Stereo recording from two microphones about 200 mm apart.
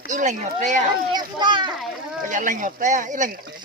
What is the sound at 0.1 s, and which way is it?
Speech, 40° right (ahead or behind).